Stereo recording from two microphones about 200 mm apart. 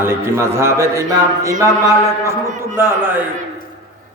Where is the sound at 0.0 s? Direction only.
10° right (ahead or behind).